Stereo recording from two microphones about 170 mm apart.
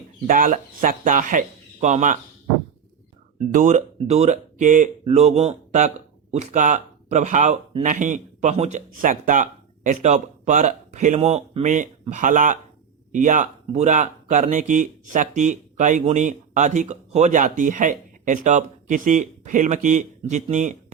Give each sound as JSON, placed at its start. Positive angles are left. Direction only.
{"t": 0.3, "sound": "speech", "side_deg": -50}
{"t": 3.3, "sound": "speech", "side_deg": -50}